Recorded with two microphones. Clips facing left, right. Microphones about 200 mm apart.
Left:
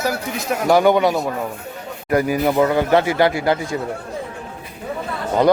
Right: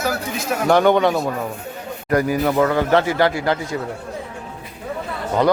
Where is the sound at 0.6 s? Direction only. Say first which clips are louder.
Even; 10° left (ahead or behind).